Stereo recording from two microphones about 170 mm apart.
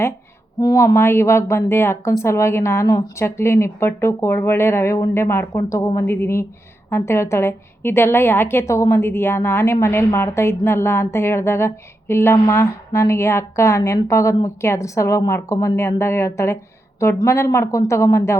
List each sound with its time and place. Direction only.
0.6 s a woman's voice: 20° left (ahead or behind)